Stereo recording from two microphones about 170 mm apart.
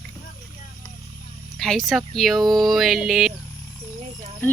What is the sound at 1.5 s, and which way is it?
Speech, centre (ahead or behind).